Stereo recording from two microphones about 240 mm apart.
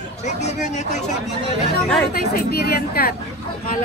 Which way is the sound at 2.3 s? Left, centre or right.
Left.